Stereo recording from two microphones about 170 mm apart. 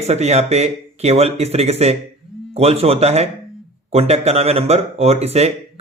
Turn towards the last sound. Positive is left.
turn(degrees=-40)  # may be behind; listen again after turning